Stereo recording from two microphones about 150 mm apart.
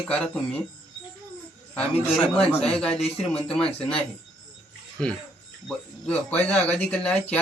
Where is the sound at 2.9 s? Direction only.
40° left (ahead or behind).